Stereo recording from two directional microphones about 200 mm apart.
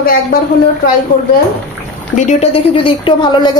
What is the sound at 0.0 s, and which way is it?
Speech, 45° left (ahead or behind).